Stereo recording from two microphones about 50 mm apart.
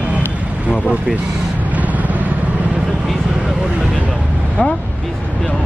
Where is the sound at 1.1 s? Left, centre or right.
Right.